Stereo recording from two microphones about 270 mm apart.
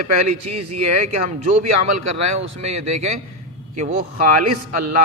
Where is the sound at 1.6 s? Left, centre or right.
Right.